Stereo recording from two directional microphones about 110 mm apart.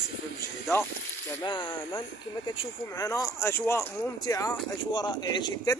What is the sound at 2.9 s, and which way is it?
Speech, 30° left (ahead or behind).